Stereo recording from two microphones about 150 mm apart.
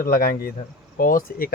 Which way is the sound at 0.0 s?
75° left (ahead or behind).